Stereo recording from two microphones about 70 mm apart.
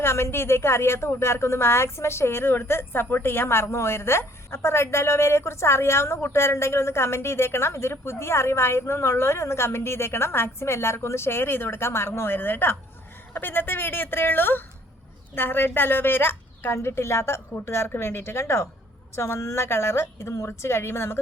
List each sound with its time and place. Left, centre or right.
0.0 s a woman's voice: left